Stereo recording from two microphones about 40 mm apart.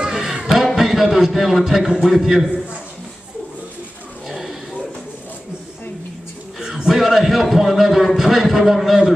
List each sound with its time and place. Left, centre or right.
0.0 s a sound: centre
0.7 s a man's voice: centre
4.3 s livestock: centre
6.9 s a man's voice: centre